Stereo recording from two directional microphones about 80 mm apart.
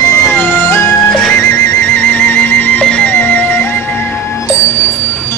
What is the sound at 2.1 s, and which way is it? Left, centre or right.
Music, centre.